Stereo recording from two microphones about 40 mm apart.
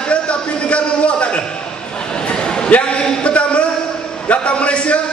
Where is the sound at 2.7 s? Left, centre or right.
Left.